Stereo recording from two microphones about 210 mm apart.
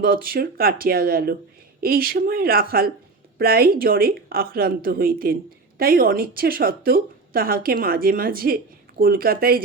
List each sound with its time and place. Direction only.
0.0 s a woman's voice: 45° right (ahead or behind)